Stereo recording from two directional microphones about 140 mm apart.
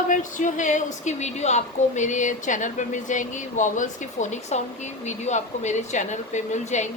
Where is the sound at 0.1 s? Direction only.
65° left (ahead or behind).